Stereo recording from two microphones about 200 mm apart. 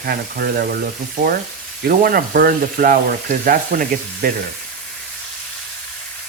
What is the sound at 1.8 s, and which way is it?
Frying, 45° right (ahead or behind).